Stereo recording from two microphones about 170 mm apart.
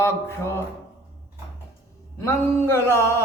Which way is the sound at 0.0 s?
15° left (ahead or behind).